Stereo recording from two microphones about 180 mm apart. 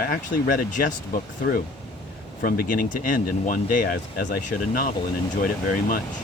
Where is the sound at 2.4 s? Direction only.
50° left (ahead or behind).